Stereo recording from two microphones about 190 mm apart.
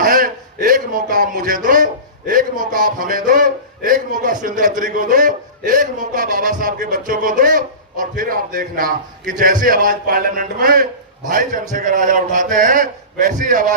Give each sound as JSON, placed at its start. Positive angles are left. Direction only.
{"t": 0.0, "sound": "a man's voice", "side_deg": -45}